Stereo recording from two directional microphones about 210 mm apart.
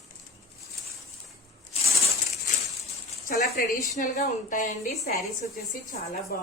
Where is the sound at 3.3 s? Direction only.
40° left (ahead or behind).